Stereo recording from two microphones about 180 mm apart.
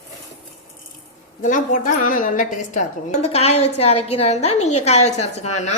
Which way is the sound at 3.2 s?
35° left (ahead or behind).